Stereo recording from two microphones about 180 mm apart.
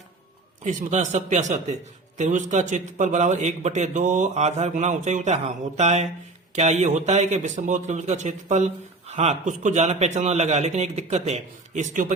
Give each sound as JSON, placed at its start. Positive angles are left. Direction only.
{"t": 0.6, "sound": "a man's voice", "side_deg": -45}